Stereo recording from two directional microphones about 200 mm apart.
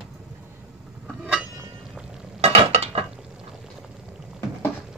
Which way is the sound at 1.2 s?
5° right (ahead or behind).